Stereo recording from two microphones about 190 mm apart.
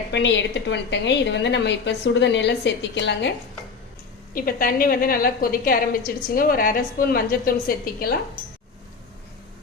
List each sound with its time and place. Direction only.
0.1 s a woman's voice: 70° left (ahead or behind)
4.4 s a woman's voice: 50° left (ahead or behind)